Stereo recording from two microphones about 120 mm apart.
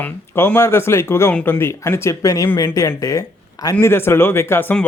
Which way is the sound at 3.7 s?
20° left (ahead or behind).